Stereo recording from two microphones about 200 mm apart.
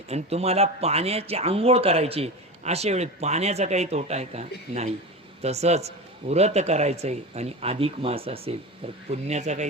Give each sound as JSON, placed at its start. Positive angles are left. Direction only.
{"t": 0.1, "sound": "speech", "side_deg": -30}